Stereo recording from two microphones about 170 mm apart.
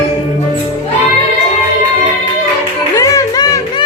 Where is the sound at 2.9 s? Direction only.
20° left (ahead or behind).